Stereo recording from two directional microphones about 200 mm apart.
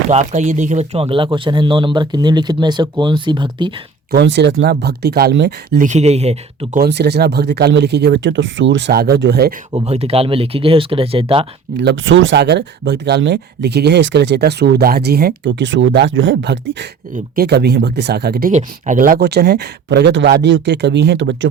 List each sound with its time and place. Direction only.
0.1 s speech: 35° right (ahead or behind)
4.1 s speech: 60° right (ahead or behind)
5.8 s speech: 35° right (ahead or behind)
6.7 s speech: 55° right (ahead or behind)
9.7 s speech: 30° right (ahead or behind)
11.8 s speech: 65° right (ahead or behind)